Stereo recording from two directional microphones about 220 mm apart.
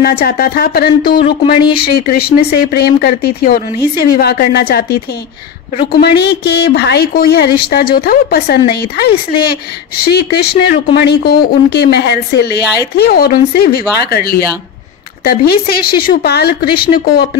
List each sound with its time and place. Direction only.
0.0 s a woman's voice: 45° left (ahead or behind)